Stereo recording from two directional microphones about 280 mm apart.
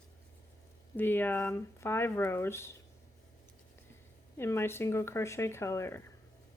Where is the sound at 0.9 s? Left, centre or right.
Centre.